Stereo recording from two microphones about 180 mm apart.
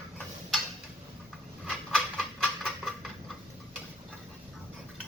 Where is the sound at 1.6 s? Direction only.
Centre (ahead or behind).